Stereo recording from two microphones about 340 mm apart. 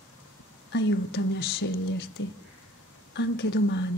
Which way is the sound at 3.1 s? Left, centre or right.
Left.